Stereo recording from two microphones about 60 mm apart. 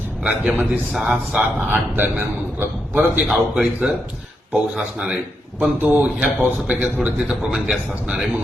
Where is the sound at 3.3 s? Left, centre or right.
Centre.